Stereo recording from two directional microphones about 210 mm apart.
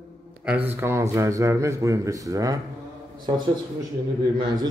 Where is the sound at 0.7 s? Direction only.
15° right (ahead or behind).